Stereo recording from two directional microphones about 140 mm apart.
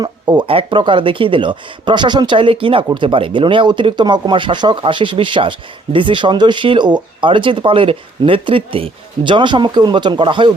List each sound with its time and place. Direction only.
0.0 s speech: 30° right (ahead or behind)